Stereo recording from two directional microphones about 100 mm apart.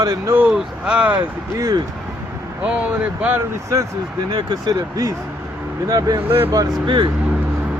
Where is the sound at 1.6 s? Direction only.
40° right (ahead or behind).